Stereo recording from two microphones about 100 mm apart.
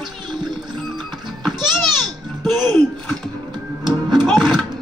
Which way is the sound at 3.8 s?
45° right (ahead or behind).